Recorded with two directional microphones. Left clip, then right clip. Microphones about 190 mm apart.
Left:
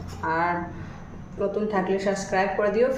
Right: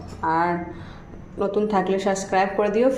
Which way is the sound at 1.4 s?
40° right (ahead or behind).